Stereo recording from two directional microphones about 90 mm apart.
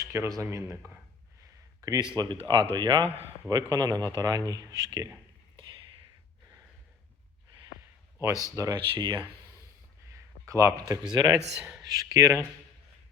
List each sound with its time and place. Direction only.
0.0 s speech: 35° right (ahead or behind)
1.8 s speech: 40° right (ahead or behind)
2.1 s a man's voice: 55° right (ahead or behind)
3.5 s a man's voice: 45° right (ahead or behind)
8.3 s speech: 40° left (ahead or behind)
8.7 s a man's voice: 55° right (ahead or behind)
10.4 s speech: 35° right (ahead or behind)
11.0 s a man's voice: 50° right (ahead or behind)
11.3 s speech: 10° right (ahead or behind)
11.9 s a man's voice: 45° right (ahead or behind)